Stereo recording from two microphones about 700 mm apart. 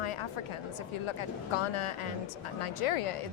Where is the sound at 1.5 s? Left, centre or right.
Left.